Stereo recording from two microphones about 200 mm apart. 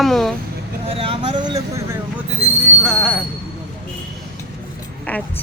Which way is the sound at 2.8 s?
Centre (ahead or behind).